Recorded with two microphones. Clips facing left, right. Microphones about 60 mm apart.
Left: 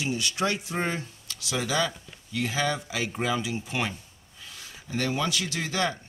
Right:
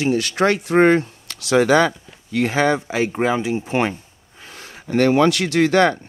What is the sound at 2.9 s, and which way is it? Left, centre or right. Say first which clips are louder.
Speech: right 9 dB; right.